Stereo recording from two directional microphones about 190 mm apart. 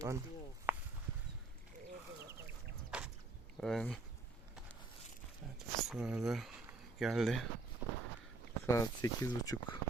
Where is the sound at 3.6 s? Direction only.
Centre (ahead or behind).